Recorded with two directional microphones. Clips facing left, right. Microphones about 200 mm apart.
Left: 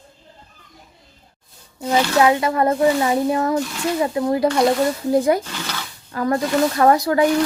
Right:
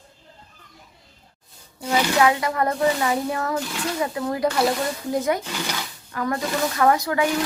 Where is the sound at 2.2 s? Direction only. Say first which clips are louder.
Left 4 dB; 25° left (ahead or behind).